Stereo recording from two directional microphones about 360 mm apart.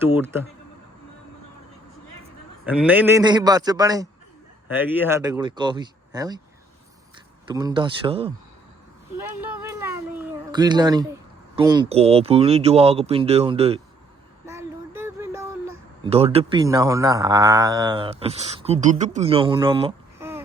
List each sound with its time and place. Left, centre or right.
0.0 s speech: centre
2.6 s speech: centre
7.4 s speech: centre
9.4 s a sound: centre
11.5 s speech: centre
14.4 s a sound: centre
16.0 s speech: centre